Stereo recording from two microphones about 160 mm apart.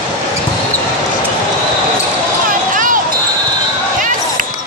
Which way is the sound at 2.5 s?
55° right (ahead or behind).